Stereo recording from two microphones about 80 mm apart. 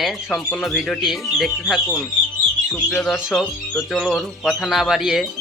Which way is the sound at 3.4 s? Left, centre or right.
Centre.